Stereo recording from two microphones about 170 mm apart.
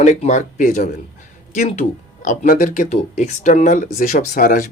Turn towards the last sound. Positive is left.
turn(degrees=50)  # may be behind; listen again after turning